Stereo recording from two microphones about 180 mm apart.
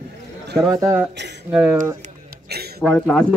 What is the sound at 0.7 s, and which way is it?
Speech, 15° right (ahead or behind).